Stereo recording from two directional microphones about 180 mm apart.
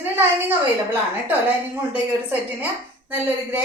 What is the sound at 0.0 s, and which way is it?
A woman's voice, 10° right (ahead or behind).